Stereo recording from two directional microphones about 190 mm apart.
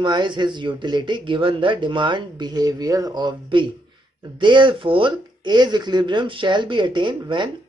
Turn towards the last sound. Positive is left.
turn(degrees=-25)  # may be behind; listen again after turning